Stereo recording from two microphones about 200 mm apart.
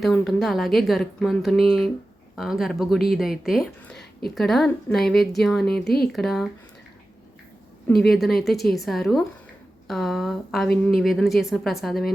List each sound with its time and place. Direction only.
0.0 s speech: centre (ahead or behind)
8.1 s speech: centre (ahead or behind)